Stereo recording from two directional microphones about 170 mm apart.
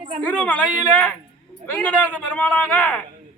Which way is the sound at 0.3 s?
10° left (ahead or behind).